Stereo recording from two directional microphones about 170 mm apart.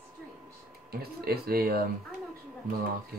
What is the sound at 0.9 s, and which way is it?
Speech, 65° right (ahead or behind).